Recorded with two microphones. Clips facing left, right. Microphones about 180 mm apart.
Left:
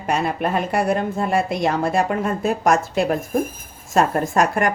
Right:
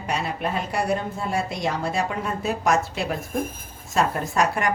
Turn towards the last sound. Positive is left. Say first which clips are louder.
# left 4 dB
turn(degrees=50)  # may be behind; listen again after turning